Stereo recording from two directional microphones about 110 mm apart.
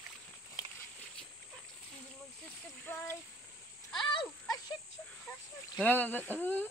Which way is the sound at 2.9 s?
15° left (ahead or behind).